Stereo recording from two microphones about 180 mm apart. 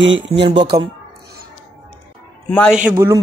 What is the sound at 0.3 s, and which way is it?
Speech, 30° right (ahead or behind).